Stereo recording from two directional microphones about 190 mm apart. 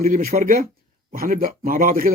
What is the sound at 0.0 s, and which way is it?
A man's voice, 50° right (ahead or behind).